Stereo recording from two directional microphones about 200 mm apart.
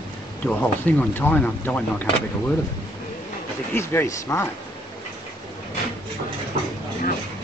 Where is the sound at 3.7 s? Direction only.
10° left (ahead or behind).